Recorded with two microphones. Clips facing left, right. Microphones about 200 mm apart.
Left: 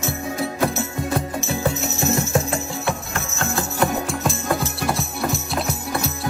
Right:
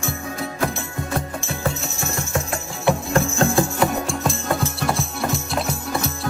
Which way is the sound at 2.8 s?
30° right (ahead or behind).